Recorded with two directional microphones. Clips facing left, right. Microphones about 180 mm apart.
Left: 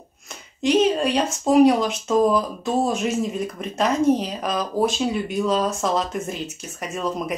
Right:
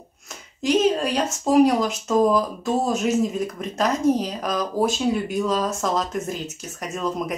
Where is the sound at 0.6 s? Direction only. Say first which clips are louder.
Left 1 dB; centre (ahead or behind).